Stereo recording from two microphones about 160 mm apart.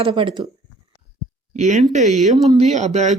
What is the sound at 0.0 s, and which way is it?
Speech, 35° right (ahead or behind).